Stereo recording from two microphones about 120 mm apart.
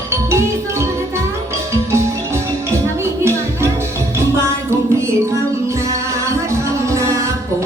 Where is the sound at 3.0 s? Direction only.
20° right (ahead or behind).